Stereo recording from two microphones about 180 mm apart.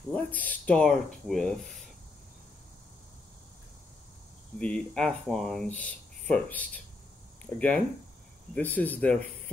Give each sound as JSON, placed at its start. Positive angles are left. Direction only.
{"t": 0.1, "sound": "speech", "side_deg": 10}
{"t": 4.6, "sound": "speech", "side_deg": 5}